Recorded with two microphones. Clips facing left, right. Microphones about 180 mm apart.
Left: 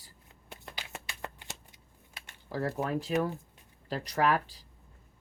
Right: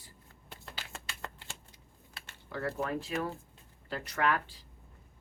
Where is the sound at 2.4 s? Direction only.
35° left (ahead or behind).